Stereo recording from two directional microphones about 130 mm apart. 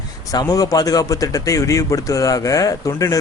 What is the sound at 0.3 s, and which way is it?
Speech, 30° left (ahead or behind).